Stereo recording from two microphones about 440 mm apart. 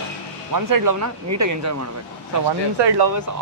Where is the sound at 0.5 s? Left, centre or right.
Right.